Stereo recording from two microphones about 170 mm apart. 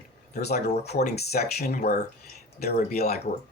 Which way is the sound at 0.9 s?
70° left (ahead or behind).